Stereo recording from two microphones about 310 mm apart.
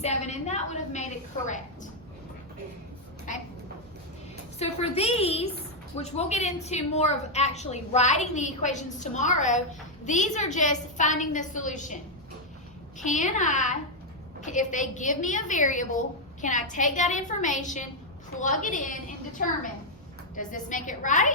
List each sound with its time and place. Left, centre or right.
0.0 s a sound: left
4.6 s a woman's voice: centre
13.0 s a woman's voice: left